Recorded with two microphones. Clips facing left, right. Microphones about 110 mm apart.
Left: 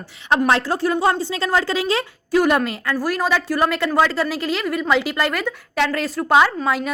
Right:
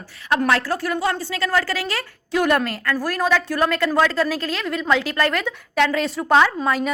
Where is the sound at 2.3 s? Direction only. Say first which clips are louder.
Left 2 dB; 5° left (ahead or behind).